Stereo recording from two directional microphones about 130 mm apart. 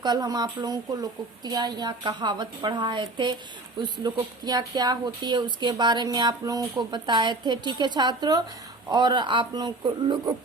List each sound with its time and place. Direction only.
0.0 s speech: 30° right (ahead or behind)